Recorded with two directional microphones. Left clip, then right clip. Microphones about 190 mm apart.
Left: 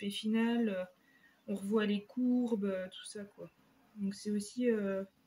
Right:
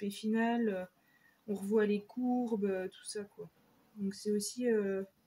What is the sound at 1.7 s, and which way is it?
Speech, 30° right (ahead or behind).